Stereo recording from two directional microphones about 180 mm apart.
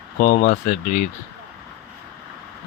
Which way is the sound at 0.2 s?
50° left (ahead or behind).